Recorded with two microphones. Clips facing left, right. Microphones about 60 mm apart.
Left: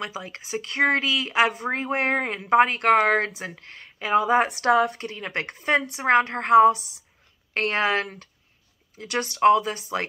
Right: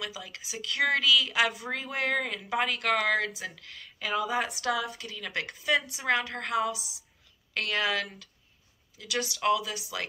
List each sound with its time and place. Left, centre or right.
0.0 s speech: left